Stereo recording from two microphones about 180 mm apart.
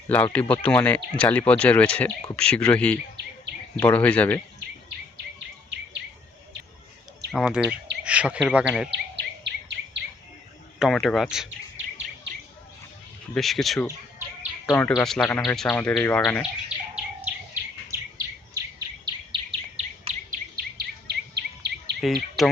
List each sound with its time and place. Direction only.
0.3 s speech: 10° left (ahead or behind)
7.3 s speech: centre (ahead or behind)
8.9 s bird vocalization: 75° right (ahead or behind)
10.8 s speech: centre (ahead or behind)
13.3 s speech: centre (ahead or behind)
14.7 s speech: 15° left (ahead or behind)
16.4 s bird: 5° right (ahead or behind)
19.0 s chirp: 30° right (ahead or behind)
20.3 s bird vocalization: 55° right (ahead or behind)
22.0 s speech: centre (ahead or behind)